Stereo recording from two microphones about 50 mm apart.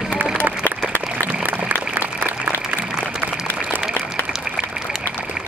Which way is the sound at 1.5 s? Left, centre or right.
Right.